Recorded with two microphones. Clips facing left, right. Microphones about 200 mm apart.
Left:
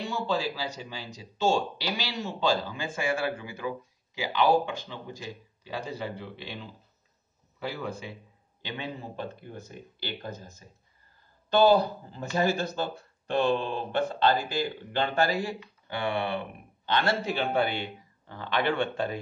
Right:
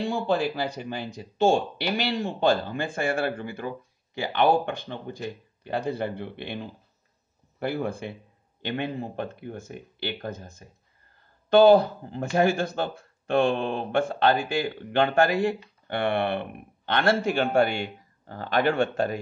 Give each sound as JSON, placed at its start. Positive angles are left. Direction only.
{"t": 0.0, "sound": "speech", "side_deg": -55}